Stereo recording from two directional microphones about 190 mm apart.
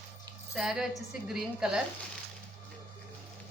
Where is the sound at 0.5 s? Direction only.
Centre (ahead or behind).